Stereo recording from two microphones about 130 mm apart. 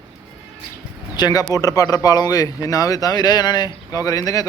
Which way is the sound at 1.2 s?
30° left (ahead or behind).